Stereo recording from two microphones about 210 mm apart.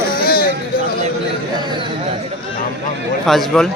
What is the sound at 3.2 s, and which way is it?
Speech, centre (ahead or behind).